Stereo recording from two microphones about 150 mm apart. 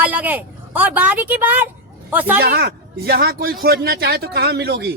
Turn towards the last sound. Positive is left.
turn(degrees=-90)